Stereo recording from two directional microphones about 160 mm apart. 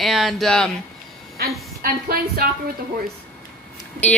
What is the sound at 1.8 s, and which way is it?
Speech, 75° right (ahead or behind).